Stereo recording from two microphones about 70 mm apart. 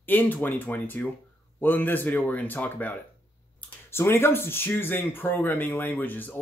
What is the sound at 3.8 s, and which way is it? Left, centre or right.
Speech, left.